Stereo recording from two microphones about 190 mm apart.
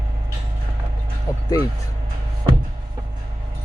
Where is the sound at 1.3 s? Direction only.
15° left (ahead or behind).